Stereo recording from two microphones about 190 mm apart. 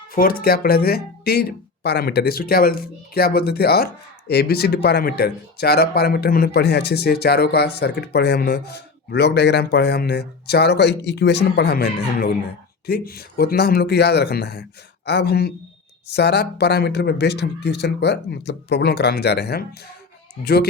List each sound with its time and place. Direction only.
0.1 s speech: 50° left (ahead or behind)